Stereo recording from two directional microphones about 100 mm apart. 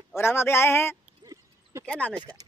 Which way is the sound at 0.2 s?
25° left (ahead or behind).